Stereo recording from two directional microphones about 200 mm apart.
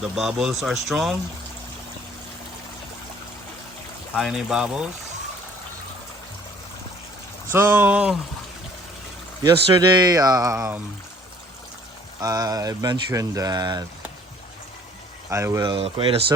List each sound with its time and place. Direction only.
0.0 s speech: 5° right (ahead or behind)
4.1 s speech: 5° right (ahead or behind)
7.5 s speech: 10° right (ahead or behind)
9.4 s speech: 20° right (ahead or behind)
12.2 s speech: 20° right (ahead or behind)
15.3 s speech: 15° right (ahead or behind)